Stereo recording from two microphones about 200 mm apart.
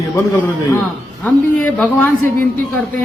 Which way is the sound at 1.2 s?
5° left (ahead or behind).